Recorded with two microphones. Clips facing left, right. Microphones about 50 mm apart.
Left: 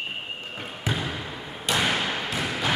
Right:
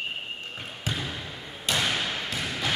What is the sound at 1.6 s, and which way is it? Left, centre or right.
Thump, centre.